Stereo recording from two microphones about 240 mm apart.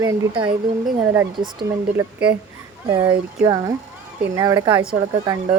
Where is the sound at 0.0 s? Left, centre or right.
Centre.